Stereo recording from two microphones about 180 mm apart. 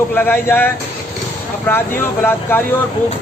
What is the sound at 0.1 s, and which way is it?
A man's voice, 10° left (ahead or behind).